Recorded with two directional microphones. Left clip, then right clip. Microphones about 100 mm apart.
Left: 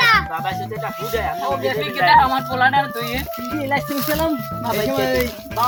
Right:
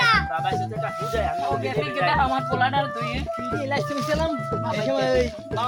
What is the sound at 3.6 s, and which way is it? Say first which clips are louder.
Speech: left 7 dB; 35° right (ahead or behind).